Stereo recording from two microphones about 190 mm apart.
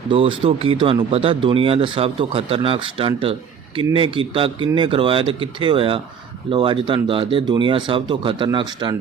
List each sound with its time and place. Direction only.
0.1 s speech: 25° right (ahead or behind)